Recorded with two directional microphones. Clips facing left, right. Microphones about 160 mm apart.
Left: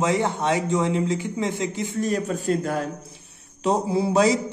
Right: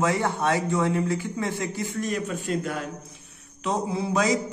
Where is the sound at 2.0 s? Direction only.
35° left (ahead or behind).